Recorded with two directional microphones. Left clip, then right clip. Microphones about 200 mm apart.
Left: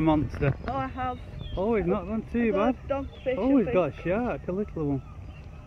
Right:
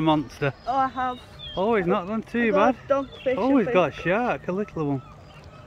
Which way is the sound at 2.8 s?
80° right.